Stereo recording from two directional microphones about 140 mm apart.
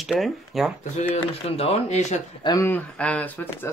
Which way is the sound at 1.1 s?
50° left (ahead or behind).